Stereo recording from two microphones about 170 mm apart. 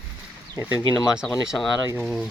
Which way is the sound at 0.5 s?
10° right (ahead or behind).